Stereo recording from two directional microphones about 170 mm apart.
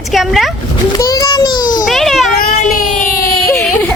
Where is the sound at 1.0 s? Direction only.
20° left (ahead or behind).